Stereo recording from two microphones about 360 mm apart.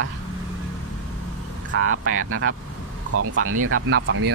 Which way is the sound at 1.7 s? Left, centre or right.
Right.